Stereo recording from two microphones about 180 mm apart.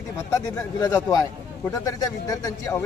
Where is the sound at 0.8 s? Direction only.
20° left (ahead or behind).